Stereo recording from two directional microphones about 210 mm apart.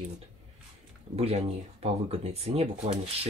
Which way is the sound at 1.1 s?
30° right (ahead or behind).